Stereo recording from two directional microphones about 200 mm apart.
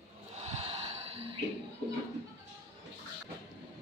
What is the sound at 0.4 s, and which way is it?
Gasp, 35° right (ahead or behind).